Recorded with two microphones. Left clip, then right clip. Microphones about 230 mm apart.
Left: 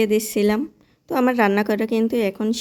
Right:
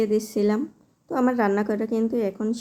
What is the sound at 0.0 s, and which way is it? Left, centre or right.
Speech, left.